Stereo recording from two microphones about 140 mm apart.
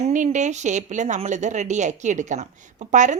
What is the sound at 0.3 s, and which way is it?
A woman's voice, 55° right (ahead or behind).